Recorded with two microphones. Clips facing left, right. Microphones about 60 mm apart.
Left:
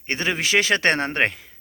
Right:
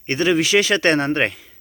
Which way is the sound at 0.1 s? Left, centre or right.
Left.